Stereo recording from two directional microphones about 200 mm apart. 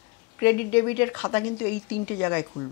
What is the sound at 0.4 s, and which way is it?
Speech, 10° left (ahead or behind).